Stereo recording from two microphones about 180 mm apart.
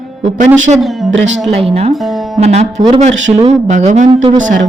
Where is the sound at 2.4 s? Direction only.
35° right (ahead or behind).